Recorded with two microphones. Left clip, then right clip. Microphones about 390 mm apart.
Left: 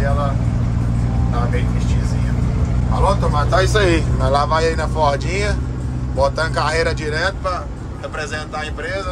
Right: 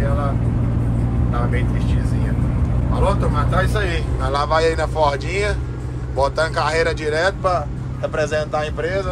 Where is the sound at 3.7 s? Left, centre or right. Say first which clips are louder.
Left 7 dB; left.